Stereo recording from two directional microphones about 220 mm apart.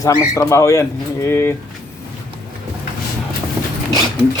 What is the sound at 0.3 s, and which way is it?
A man's voice, 15° left (ahead or behind).